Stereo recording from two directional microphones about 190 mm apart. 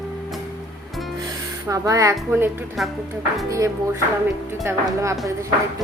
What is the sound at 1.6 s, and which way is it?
A woman's voice, 15° right (ahead or behind).